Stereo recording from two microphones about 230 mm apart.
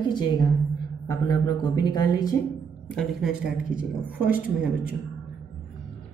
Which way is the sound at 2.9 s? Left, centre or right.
Centre.